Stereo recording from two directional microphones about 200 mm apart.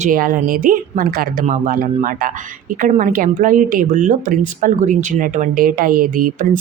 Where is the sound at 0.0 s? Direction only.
45° right (ahead or behind).